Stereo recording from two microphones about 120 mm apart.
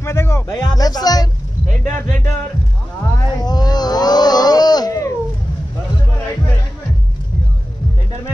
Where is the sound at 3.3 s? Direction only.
35° left (ahead or behind).